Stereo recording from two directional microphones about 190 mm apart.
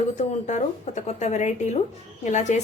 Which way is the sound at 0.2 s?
40° left (ahead or behind).